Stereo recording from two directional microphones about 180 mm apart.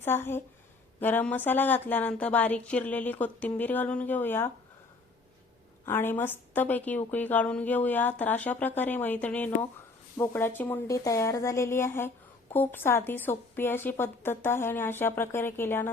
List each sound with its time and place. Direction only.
0.0 s a woman's voice: 10° left (ahead or behind)
5.8 s a woman's voice: 10° left (ahead or behind)